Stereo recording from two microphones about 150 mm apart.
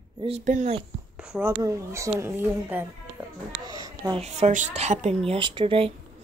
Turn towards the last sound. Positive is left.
turn(degrees=-35)  # may be behind; listen again after turning